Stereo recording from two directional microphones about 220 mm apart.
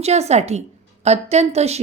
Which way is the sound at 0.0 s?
30° right (ahead or behind).